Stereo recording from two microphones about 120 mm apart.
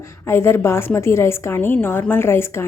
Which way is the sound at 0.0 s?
20° left (ahead or behind).